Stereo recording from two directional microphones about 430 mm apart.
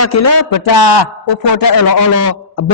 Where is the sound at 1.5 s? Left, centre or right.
Left.